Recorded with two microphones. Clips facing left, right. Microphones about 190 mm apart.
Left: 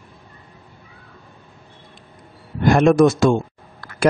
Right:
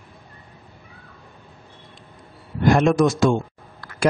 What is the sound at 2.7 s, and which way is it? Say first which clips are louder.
Speech: left 3 dB; 55° left (ahead or behind).